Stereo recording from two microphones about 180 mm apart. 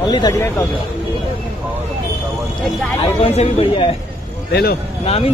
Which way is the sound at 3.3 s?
35° left (ahead or behind).